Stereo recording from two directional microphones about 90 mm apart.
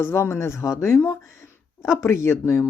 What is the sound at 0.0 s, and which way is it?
Speech, 30° left (ahead or behind).